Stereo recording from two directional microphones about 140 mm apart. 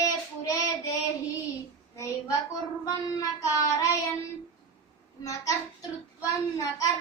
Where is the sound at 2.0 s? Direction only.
25° left (ahead or behind).